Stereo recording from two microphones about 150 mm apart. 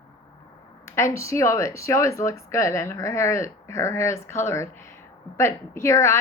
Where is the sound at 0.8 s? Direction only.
20° left (ahead or behind).